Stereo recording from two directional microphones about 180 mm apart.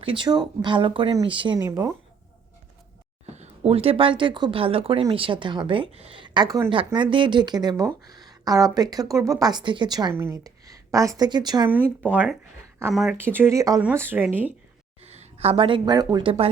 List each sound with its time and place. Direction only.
0.0 s speech: 25° right (ahead or behind)
3.3 s speech: 35° right (ahead or behind)
11.7 s speech: 10° right (ahead or behind)
13.1 s speech: 10° right (ahead or behind)
15.0 s speech: 35° right (ahead or behind)